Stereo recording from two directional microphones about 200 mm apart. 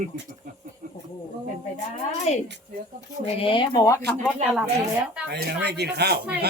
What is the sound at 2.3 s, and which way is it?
Speech, 35° left (ahead or behind).